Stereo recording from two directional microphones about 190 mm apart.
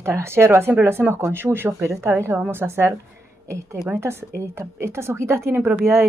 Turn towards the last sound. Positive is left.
turn(degrees=-10)  # may be behind; listen again after turning